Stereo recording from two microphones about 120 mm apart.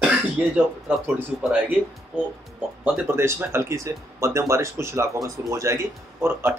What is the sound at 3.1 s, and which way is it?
Speech, 20° right (ahead or behind).